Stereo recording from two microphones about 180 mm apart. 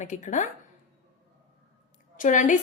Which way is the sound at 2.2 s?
45° left (ahead or behind).